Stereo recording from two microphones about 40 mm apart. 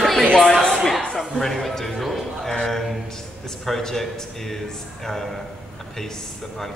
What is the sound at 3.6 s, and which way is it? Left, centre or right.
Speech, centre.